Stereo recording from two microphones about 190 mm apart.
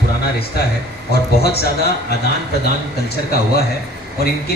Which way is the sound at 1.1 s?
55° left (ahead or behind).